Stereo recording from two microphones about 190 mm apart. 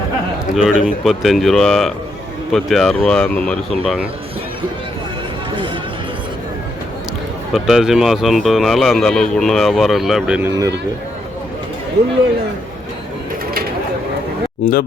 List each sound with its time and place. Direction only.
0.5 s speech: 5° right (ahead or behind)
7.5 s speech: centre (ahead or behind)
14.6 s speech: 50° left (ahead or behind)